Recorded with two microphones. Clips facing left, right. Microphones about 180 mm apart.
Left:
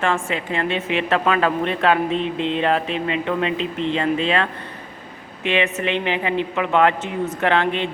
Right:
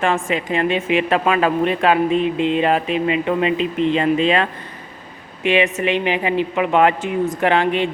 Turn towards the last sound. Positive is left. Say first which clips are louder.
# right 3 dB
turn(degrees=-10)  # may be behind; listen again after turning